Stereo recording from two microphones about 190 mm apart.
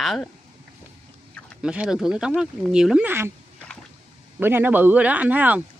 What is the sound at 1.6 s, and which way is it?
Speech, 5° right (ahead or behind).